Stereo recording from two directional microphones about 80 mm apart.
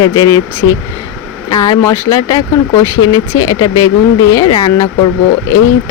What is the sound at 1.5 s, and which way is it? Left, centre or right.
Speech, left.